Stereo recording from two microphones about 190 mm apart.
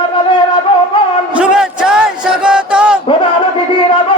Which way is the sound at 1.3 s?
5° right (ahead or behind).